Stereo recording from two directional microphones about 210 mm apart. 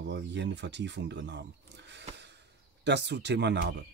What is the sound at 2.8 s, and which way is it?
Speech, 55° right (ahead or behind).